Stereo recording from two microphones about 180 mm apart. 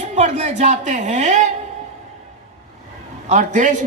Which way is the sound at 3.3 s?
45° right (ahead or behind).